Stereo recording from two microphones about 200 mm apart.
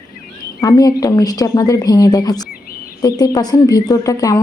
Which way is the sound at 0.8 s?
20° left (ahead or behind).